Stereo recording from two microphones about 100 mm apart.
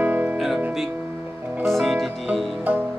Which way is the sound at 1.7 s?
Centre (ahead or behind).